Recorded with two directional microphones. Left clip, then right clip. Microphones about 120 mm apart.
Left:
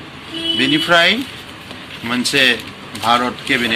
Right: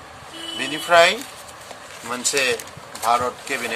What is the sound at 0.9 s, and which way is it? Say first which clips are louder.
Speech: even; 20° right (ahead or behind).